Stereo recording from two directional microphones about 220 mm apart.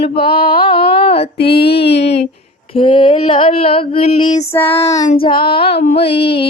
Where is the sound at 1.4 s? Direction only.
50° left (ahead or behind).